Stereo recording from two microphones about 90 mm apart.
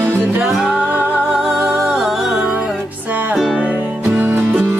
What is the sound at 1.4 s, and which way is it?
Music, 5° right (ahead or behind).